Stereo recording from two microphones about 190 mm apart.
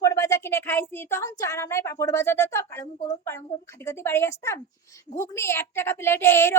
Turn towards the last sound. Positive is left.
turn(degrees=15)  # may be behind; listen again after turning